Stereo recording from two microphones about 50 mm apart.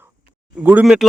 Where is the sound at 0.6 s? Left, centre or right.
Right.